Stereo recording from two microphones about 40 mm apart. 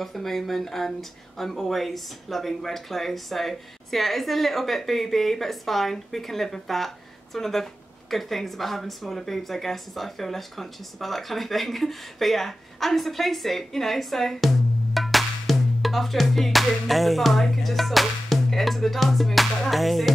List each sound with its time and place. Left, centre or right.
0.0 s a woman's voice: centre
15.0 s music: centre
19.7 s a woman's voice: centre